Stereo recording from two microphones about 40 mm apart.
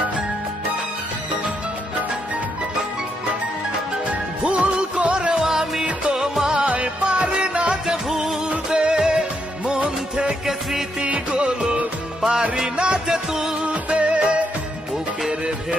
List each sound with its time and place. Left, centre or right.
4.4 s music: right
5.3 s music: centre
6.6 s music: right
7.8 s music: centre
8.5 s music: right